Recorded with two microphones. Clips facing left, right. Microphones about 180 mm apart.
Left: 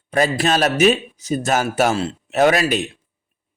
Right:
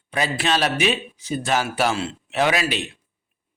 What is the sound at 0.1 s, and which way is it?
Speech, 45° left (ahead or behind).